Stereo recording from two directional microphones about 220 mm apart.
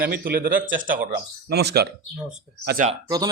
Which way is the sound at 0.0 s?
40° right (ahead or behind).